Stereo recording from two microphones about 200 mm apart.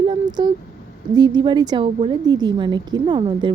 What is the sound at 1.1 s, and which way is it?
A woman's voice, 20° right (ahead or behind).